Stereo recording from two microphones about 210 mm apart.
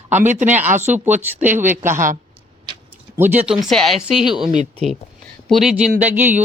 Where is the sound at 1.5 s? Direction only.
10° right (ahead or behind).